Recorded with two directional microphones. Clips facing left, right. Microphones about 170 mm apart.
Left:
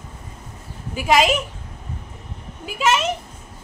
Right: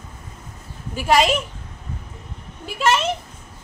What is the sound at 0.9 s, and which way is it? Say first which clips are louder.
Speech: even; 5° left (ahead or behind).